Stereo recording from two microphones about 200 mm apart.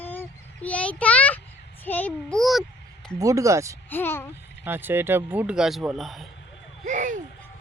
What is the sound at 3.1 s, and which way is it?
Speech, 15° right (ahead or behind).